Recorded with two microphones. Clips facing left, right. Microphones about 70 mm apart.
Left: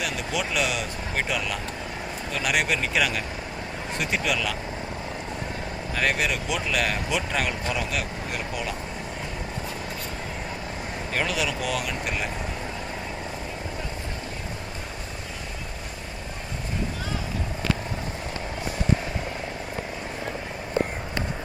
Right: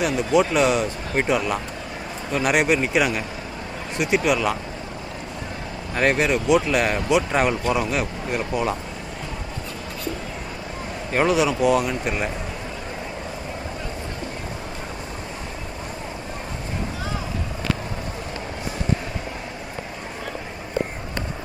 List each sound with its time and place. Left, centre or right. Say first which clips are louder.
0.0 s speech: right 9 dB; right
5.9 s speech: right 6 dB; right
11.1 s speech: right 8 dB; right